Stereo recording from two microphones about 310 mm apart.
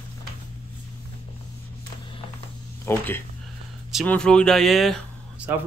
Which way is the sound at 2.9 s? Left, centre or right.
Centre.